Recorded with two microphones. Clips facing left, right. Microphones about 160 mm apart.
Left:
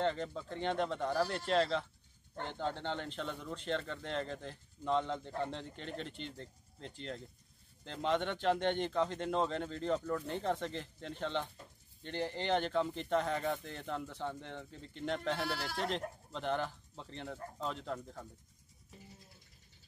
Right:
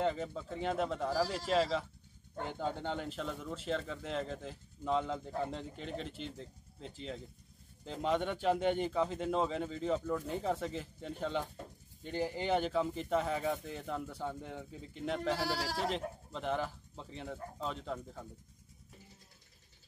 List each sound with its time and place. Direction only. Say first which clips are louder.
0.0 s speech: right 1 dB; 5° right (ahead or behind)
15.4 s speech: right 3 dB; 35° right (ahead or behind)
15.8 s speech: right 1 dB; 5° right (ahead or behind)